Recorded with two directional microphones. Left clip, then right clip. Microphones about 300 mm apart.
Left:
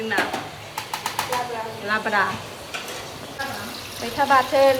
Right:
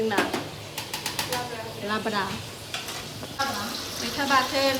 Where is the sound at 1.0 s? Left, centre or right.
Centre.